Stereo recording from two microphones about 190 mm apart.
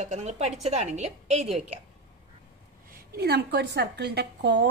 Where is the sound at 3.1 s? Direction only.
60° right (ahead or behind).